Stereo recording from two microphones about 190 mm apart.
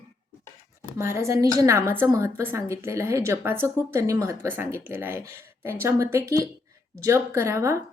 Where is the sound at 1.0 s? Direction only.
15° right (ahead or behind).